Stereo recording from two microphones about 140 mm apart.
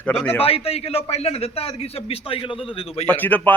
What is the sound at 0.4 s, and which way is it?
A man's voice, 45° left (ahead or behind).